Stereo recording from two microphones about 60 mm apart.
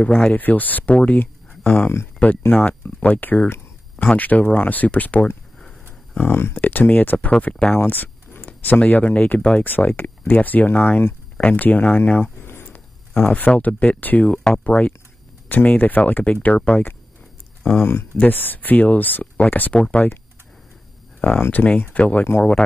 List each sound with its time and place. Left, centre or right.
0.0 s speech: left
1.6 s speech: left
2.5 s speech: left
5.9 s a sound: left
6.6 s speech: left
7.8 s a sound: left
8.4 s speech: left
11.3 s speech: left
12.2 s a sound: left
12.7 s speech: left
17.6 s speech: left
18.2 s speech: left
21.2 s speech: left